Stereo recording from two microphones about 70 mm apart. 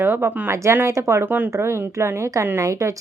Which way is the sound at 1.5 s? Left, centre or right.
Right.